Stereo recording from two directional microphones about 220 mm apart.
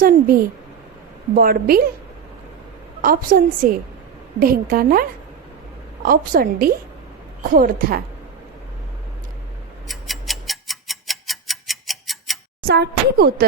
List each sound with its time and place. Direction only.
0.0 s a woman's voice: 40° right (ahead or behind)
3.0 s a woman's voice: 40° right (ahead or behind)
9.9 s tick-tock: centre (ahead or behind)
12.6 s speech: 45° right (ahead or behind)